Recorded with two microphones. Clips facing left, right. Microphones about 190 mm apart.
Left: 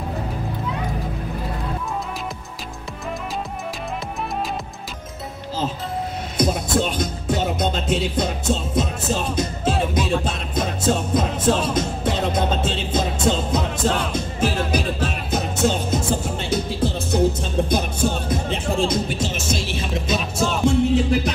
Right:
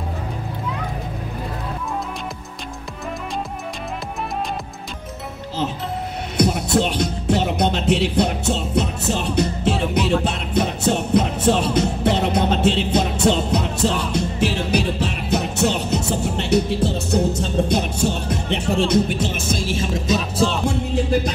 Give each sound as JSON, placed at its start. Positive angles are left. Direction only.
{"t": 6.3, "sound": "music", "side_deg": -65}
{"t": 17.6, "sound": "speech", "side_deg": -70}